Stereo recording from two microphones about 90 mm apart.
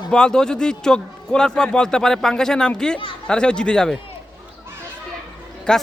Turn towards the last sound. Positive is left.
turn(degrees=10)  # may be behind; listen again after turning